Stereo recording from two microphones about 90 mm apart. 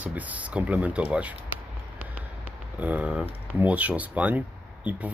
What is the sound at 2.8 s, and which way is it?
Speech, 15° right (ahead or behind).